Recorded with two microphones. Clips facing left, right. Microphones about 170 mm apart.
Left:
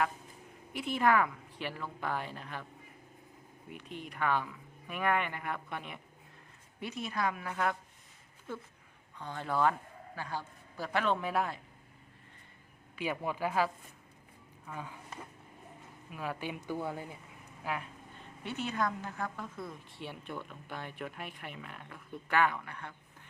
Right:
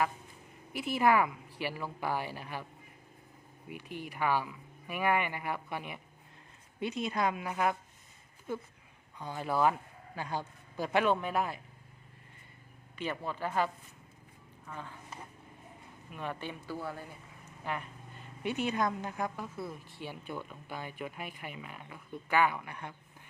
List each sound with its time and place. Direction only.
0.7 s speech: 5° right (ahead or behind)
3.7 s speech: 5° right (ahead or behind)
6.7 s a woman's voice: 20° right (ahead or behind)
9.1 s speech: 10° right (ahead or behind)
11.1 s speech: centre (ahead or behind)
13.0 s speech: 10° left (ahead or behind)
14.7 s speech: 10° left (ahead or behind)
16.1 s speech: 5° left (ahead or behind)
16.6 s speech: 20° left (ahead or behind)
17.6 s speech: centre (ahead or behind)
18.4 s speech: 15° right (ahead or behind)